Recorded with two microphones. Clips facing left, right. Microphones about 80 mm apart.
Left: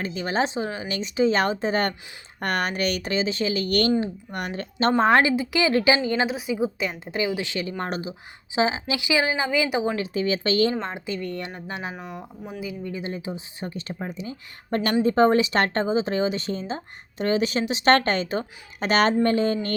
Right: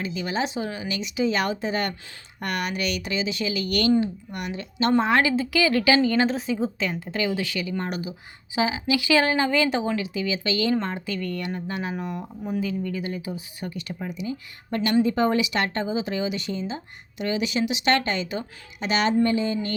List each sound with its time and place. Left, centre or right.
0.0 s speech: left
4.9 s speech: left
5.4 s speech: left
6.2 s speech: centre
9.8 s speech: left
10.8 s speech: centre
11.9 s speech: centre; by 19.7 s left